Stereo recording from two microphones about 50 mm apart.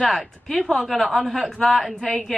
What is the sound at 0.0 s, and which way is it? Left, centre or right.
Speech, centre.